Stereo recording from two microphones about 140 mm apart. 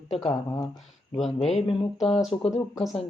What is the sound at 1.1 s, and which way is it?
Speech, centre (ahead or behind).